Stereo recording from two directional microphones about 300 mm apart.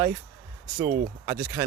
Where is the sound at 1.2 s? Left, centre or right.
Centre.